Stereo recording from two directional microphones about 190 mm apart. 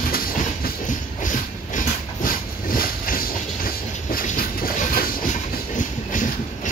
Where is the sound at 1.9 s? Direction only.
50° left (ahead or behind).